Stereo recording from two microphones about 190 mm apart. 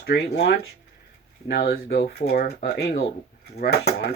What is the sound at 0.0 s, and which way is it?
Speech, 60° left (ahead or behind).